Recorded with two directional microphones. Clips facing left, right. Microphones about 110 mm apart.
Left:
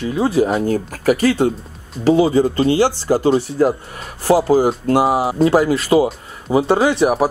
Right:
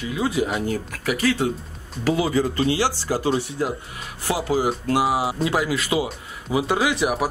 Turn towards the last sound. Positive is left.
turn(degrees=35)  # may be behind; listen again after turning